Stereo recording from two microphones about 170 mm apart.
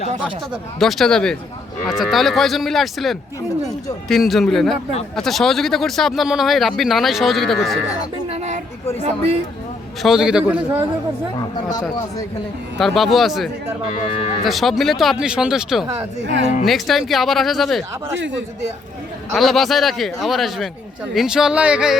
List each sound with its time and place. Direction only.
0.5 s speech: centre (ahead or behind)
8.3 s a sound: 40° right (ahead or behind)
10.0 s speech: 5° right (ahead or behind)
11.3 s speech: 20° left (ahead or behind)
12.8 s speech: centre (ahead or behind)
13.9 s speech: 40° left (ahead or behind)
14.4 s speech: centre (ahead or behind)
16.2 s a woman's voice: 90° right
16.6 s speech: centre (ahead or behind)
19.3 s speech: centre (ahead or behind)